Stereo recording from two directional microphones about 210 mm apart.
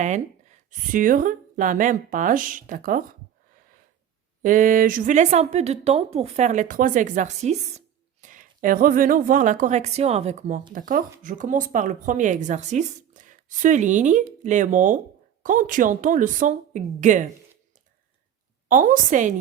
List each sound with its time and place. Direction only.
0.0 s speech: 35° right (ahead or behind)
4.4 s speech: 40° right (ahead or behind)
18.7 s speech: 40° right (ahead or behind)